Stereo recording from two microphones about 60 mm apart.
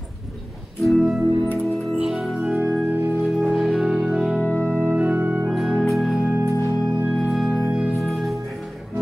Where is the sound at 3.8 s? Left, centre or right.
Centre.